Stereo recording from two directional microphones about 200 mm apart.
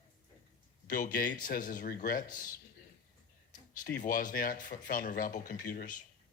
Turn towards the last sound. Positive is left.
turn(degrees=40)  # may be behind; listen again after turning